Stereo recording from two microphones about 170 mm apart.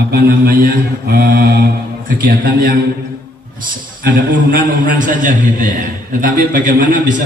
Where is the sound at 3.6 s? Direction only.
50° right (ahead or behind).